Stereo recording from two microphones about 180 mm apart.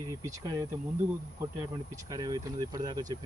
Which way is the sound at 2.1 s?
20° right (ahead or behind).